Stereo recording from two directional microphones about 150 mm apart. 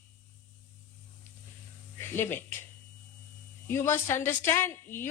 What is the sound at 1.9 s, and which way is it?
Speech, 15° left (ahead or behind).